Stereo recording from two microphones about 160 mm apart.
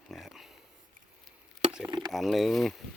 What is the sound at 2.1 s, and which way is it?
Speech, centre (ahead or behind).